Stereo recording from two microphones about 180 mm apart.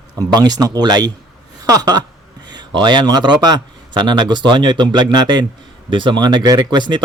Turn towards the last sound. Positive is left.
turn(degrees=-25)  # may be behind; listen again after turning